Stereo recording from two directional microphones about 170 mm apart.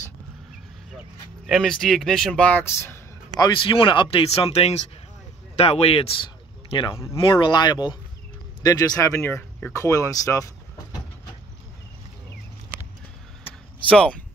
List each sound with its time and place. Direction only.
1.5 s speech: centre (ahead or behind); by 10.4 s 20° left (ahead or behind)
13.8 s speech: 5° left (ahead or behind)